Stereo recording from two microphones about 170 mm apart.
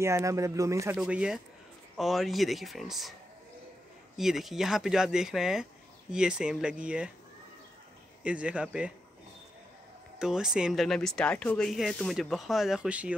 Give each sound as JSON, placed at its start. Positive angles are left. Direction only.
{"t": 0.0, "sound": "speech", "side_deg": -15}
{"t": 0.9, "sound": "speech", "side_deg": -5}
{"t": 4.2, "sound": "speech", "side_deg": 0}
{"t": 8.2, "sound": "speech", "side_deg": -5}
{"t": 10.1, "sound": "speech", "side_deg": -5}